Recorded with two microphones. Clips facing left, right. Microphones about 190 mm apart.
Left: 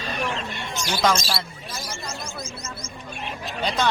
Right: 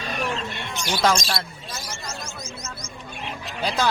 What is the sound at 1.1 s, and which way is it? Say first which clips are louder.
Speech: right 1 dB; 5° left (ahead or behind).